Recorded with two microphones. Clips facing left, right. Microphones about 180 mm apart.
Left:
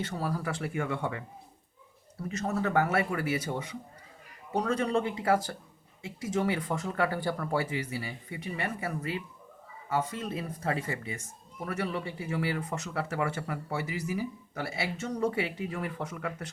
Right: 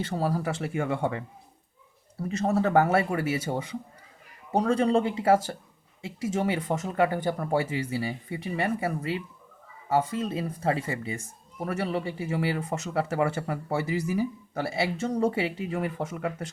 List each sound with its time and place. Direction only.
0.0 s speech: 30° right (ahead or behind)
2.3 s speech: 30° right (ahead or behind)